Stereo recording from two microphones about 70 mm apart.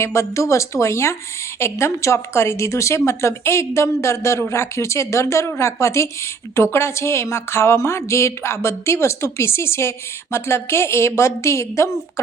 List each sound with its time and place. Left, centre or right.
0.0 s speech: left